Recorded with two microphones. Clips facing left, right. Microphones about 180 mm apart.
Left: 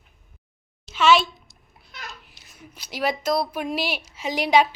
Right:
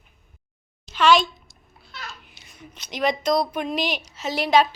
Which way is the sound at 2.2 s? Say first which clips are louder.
Right 2 dB; centre (ahead or behind).